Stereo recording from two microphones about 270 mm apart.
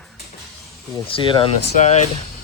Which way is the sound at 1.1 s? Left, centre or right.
Centre.